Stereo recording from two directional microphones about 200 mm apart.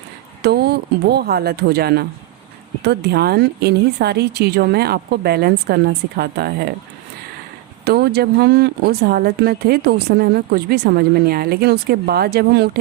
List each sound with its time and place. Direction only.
0.4 s speech: 55° right (ahead or behind)
7.9 s speech: 50° right (ahead or behind)